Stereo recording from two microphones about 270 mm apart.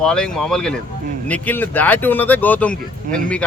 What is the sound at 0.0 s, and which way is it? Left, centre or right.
Speech, centre.